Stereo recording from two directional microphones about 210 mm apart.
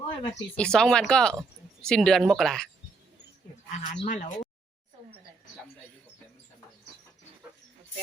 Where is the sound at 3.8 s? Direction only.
35° left (ahead or behind).